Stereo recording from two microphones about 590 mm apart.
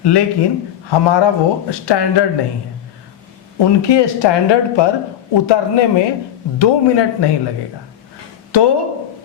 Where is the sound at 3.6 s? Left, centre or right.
Left.